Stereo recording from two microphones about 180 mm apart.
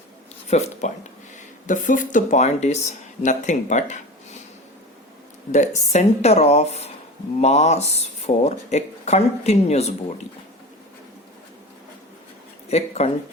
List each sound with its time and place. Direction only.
0.4 s speech: 40° left (ahead or behind)
5.5 s speech: 40° left (ahead or behind)
12.6 s speech: 35° left (ahead or behind)